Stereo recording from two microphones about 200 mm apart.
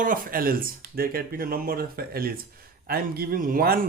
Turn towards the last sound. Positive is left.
turn(degrees=-45)  # may be behind; listen again after turning